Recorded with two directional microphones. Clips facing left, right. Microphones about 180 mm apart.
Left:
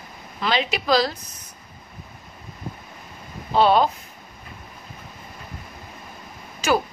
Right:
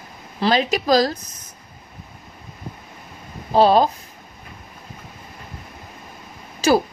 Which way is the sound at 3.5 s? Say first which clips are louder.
Right 3 dB; 40° right (ahead or behind).